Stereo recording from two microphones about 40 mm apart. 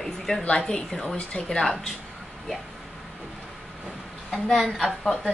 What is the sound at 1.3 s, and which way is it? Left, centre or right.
Speech, left.